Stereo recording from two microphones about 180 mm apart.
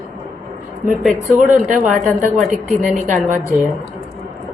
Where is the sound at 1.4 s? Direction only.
45° right (ahead or behind).